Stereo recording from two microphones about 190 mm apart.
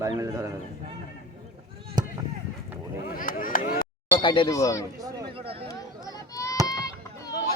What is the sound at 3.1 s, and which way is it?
Speech, 45° left (ahead or behind).